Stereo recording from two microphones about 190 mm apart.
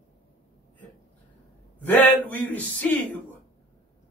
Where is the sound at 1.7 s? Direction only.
10° left (ahead or behind).